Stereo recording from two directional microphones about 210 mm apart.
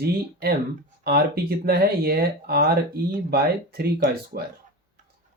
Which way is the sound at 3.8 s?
45° right (ahead or behind).